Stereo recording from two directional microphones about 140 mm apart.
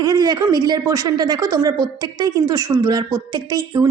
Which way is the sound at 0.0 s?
30° right (ahead or behind).